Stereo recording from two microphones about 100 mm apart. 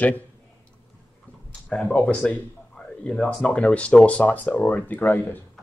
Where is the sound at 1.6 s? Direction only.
5° left (ahead or behind).